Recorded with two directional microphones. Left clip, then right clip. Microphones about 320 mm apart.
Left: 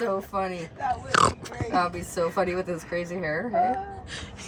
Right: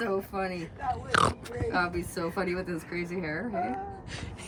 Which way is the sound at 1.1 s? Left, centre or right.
Centre.